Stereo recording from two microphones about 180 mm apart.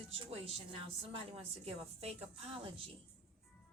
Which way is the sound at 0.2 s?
35° right (ahead or behind).